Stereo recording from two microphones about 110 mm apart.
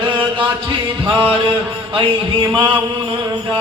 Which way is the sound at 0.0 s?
50° right (ahead or behind).